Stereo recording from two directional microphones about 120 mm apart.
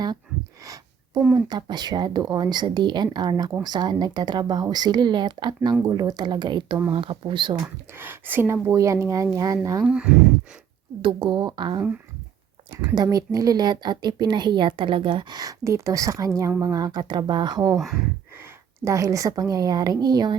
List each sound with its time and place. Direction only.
0.6 s a sound: 30° right (ahead or behind)
1.3 s speech: 35° right (ahead or behind)
7.9 s speech: 15° right (ahead or behind)
9.8 s speech: 10° right (ahead or behind)
11.0 s speech: 40° right (ahead or behind)
12.9 s speech: 35° right (ahead or behind)
18.9 s speech: 25° right (ahead or behind)